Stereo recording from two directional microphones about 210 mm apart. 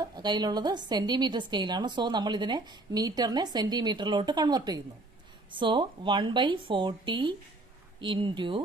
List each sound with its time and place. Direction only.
0.0 s a woman's voice: 20° right (ahead or behind)